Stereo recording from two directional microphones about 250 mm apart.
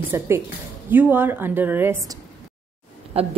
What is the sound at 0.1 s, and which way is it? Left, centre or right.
A woman's voice, centre.